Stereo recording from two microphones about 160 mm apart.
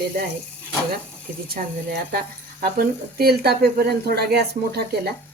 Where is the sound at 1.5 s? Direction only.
65° right (ahead or behind); by 5.1 s 85° right.